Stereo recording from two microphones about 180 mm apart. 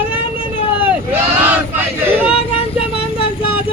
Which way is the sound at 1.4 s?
10° right (ahead or behind).